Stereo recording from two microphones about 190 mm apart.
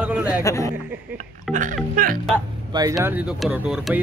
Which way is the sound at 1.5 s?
45° right (ahead or behind).